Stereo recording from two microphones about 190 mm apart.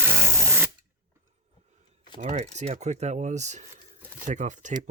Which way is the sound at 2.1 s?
40° right (ahead or behind).